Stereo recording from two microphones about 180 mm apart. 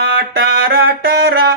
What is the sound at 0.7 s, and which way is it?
Speech, 55° right (ahead or behind).